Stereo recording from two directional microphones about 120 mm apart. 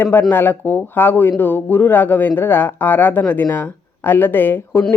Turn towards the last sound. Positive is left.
turn(degrees=20)  # may be behind; listen again after turning